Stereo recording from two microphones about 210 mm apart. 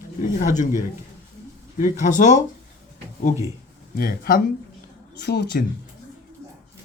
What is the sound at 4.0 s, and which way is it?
Speech, 45° left (ahead or behind).